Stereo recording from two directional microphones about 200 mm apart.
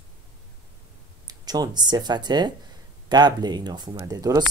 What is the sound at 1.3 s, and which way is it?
Speech, 20° right (ahead or behind).